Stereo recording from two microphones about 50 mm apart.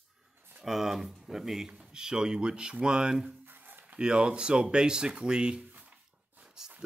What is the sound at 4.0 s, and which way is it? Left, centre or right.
Speech, centre.